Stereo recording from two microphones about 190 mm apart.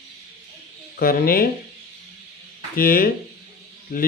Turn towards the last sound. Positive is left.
turn(degrees=55)  # may be behind; listen again after turning